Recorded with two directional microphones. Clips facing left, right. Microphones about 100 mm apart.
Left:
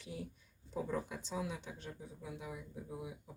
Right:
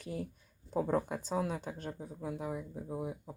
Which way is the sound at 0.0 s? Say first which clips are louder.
Right 6 dB; 50° right (ahead or behind).